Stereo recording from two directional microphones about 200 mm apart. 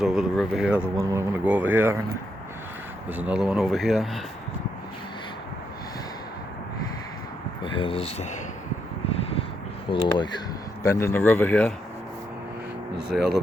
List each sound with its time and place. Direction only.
0.0 s speech: centre (ahead or behind)
3.1 s speech: 5° right (ahead or behind)
7.6 s speech: 25° left (ahead or behind)
9.9 s speech: 20° left (ahead or behind)
13.1 s speech: 5° right (ahead or behind)